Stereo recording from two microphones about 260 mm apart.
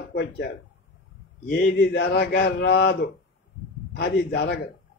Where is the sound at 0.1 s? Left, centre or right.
Left.